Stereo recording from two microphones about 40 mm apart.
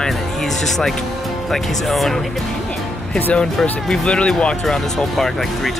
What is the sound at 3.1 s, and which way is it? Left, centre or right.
Speech, left.